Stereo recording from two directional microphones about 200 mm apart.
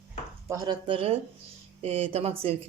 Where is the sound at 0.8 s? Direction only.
25° right (ahead or behind).